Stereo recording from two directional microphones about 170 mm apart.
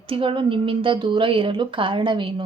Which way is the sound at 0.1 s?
30° right (ahead or behind).